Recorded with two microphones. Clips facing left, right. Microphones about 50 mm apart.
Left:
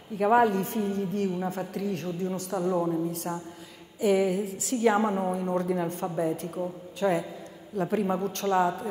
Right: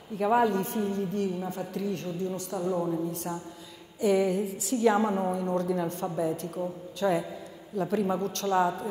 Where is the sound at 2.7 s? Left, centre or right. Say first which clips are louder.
Left 2 dB; centre.